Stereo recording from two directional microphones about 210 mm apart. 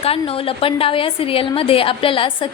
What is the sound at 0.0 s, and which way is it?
A woman's voice, 25° left (ahead or behind).